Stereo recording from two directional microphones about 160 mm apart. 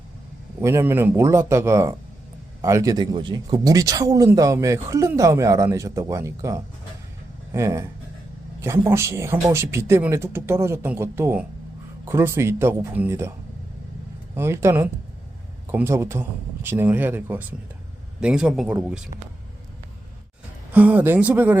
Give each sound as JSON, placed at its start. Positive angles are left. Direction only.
{"t": 0.6, "sound": "speech", "side_deg": -15}
{"t": 14.3, "sound": "a man's voice", "side_deg": -15}
{"t": 20.7, "sound": "speech", "side_deg": -10}